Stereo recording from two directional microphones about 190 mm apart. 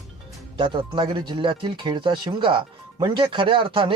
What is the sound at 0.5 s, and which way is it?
Speech, 25° right (ahead or behind).